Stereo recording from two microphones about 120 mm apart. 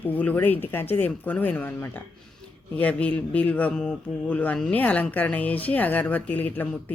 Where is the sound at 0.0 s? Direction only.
15° left (ahead or behind).